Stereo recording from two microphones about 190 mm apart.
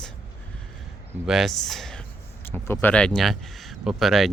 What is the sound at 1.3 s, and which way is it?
Speech, centre (ahead or behind).